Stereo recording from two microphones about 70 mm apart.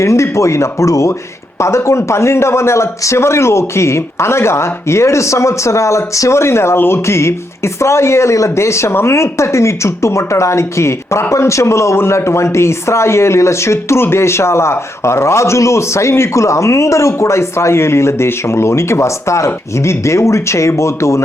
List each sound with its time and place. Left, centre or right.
0.0 s a man's voice: left